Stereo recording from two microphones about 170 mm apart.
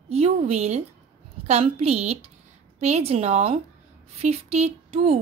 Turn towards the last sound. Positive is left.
turn(degrees=-35)  # may be behind; listen again after turning